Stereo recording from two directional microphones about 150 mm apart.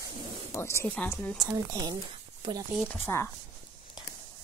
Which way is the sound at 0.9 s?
5° left (ahead or behind).